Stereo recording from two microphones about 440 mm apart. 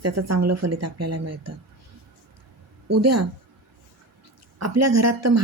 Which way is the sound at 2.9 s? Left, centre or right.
Right.